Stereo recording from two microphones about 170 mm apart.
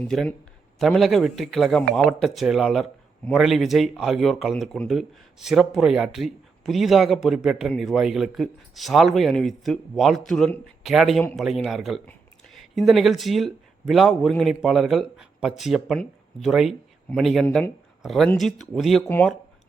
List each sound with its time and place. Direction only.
0.0 s a man's voice: 5° left (ahead or behind)
17.4 s speech: 10° left (ahead or behind)